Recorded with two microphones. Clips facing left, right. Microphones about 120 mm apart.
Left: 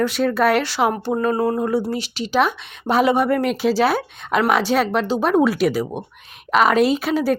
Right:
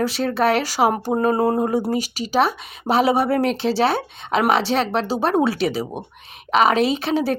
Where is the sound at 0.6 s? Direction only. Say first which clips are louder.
Right 1 dB; 40° right (ahead or behind).